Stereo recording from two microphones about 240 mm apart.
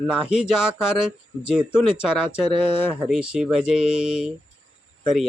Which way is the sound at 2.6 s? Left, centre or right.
Left.